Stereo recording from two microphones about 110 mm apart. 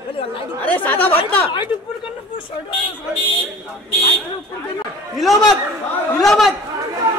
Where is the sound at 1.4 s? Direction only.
50° left (ahead or behind).